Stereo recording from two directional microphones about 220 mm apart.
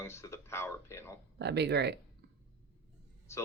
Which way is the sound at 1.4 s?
50° right (ahead or behind).